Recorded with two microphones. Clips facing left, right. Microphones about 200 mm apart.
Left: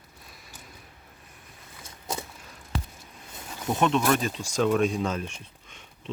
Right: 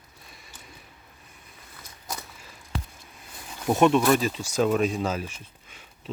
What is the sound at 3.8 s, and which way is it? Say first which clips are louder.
Speech: right 4 dB; 10° right (ahead or behind).